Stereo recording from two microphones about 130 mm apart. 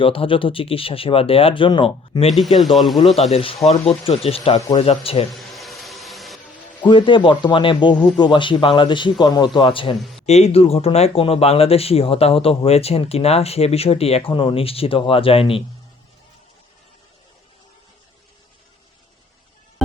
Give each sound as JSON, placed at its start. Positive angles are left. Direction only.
{"t": 0.0, "sound": "speech", "side_deg": 45}
{"t": 2.3, "sound": "speech", "side_deg": 0}
{"t": 3.3, "sound": "speech", "side_deg": 50}
{"t": 5.3, "sound": "a sound", "side_deg": 0}
{"t": 6.8, "sound": "a man's voice", "side_deg": 40}
{"t": 7.9, "sound": "speech", "side_deg": 10}
{"t": 8.2, "sound": "a man's voice", "side_deg": 40}
{"t": 10.0, "sound": "a sound", "side_deg": 0}
{"t": 10.2, "sound": "speech", "side_deg": 55}